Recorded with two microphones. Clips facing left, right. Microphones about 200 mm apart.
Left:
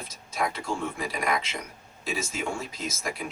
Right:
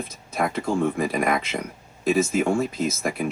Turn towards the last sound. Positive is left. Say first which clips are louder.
# right 8 dB
turn(degrees=-55)  # may be behind; listen again after turning